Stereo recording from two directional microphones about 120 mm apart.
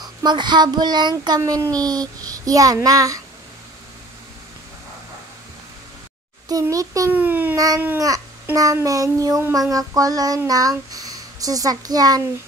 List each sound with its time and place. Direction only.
0.0 s speech: 35° right (ahead or behind)
1.4 s child singing: 30° right (ahead or behind)
6.5 s child singing: 30° right (ahead or behind)
7.1 s a child's voice: 15° right (ahead or behind)
7.5 s child singing: 30° right (ahead or behind)
10.9 s speech: 30° right (ahead or behind)